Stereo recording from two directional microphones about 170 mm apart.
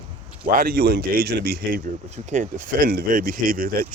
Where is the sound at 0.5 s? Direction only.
65° right (ahead or behind).